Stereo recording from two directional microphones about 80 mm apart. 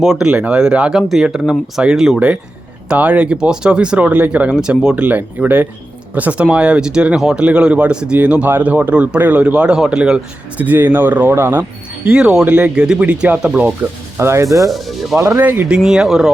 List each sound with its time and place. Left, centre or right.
0.0 s speech: centre
0.3 s speech: centre
10.6 s speech: right
12.0 s speech: centre
14.2 s speech: right
14.7 s speech: centre
15.4 s speech: right
15.7 s speech: centre